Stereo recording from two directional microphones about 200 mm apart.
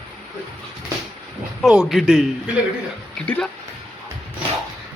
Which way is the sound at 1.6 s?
Centre (ahead or behind).